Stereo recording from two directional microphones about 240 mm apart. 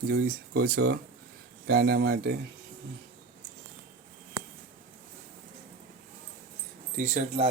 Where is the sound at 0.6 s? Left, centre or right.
Right.